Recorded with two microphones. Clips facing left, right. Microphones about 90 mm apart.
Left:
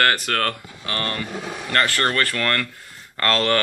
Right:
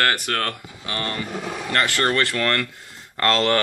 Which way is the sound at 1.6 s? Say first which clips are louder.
Left 1 dB; 20° right (ahead or behind).